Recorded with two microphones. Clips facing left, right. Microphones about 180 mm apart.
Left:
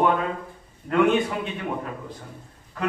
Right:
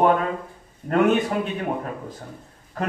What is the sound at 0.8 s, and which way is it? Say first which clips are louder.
Speech: right 1 dB; 40° right (ahead or behind).